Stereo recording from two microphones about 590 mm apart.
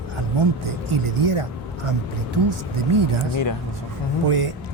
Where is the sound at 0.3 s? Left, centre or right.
Right.